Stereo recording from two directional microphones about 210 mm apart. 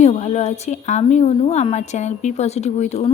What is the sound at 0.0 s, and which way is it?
A woman's voice, 35° left (ahead or behind).